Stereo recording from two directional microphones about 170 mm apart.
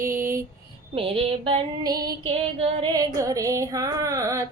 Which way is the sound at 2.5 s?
35° right (ahead or behind).